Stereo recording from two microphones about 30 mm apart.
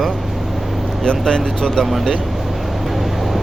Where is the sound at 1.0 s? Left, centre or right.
Left.